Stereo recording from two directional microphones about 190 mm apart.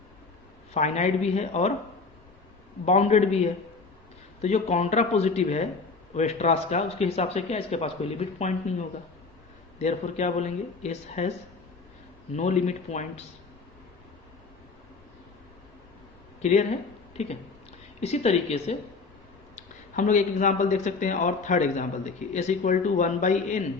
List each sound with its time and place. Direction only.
0.7 s speech: 35° left (ahead or behind)
2.8 s speech: 35° left (ahead or behind)
9.7 s speech: 40° left (ahead or behind)
12.4 s speech: 40° left (ahead or behind)
16.4 s speech: 35° left (ahead or behind)
18.0 s speech: 35° left (ahead or behind)